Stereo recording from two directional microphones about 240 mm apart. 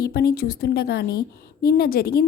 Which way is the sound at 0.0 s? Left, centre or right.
Left.